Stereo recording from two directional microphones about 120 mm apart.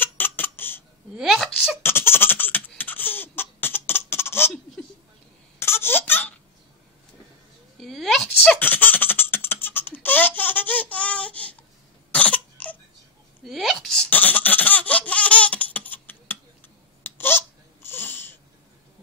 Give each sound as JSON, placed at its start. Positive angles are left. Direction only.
{"t": 0.0, "sound": "baby laughter", "side_deg": 15}
{"t": 1.1, "sound": "speech", "side_deg": -5}
{"t": 1.8, "sound": "baby laughter", "side_deg": 20}
{"t": 4.8, "sound": "a sound", "side_deg": 10}
{"t": 5.6, "sound": "baby laughter", "side_deg": 20}
{"t": 7.7, "sound": "a sound", "side_deg": 0}
{"t": 8.5, "sound": "laughter", "side_deg": 15}
{"t": 12.1, "sound": "cough", "side_deg": 10}
{"t": 13.5, "sound": "laughter", "side_deg": 0}
{"t": 17.0, "sound": "babbling", "side_deg": 20}